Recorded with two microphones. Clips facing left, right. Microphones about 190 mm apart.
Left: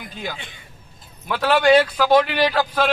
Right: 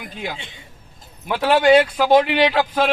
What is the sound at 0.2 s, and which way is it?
Speech, 25° right (ahead or behind).